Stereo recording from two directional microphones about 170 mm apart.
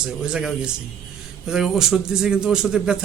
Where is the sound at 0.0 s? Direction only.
5° right (ahead or behind).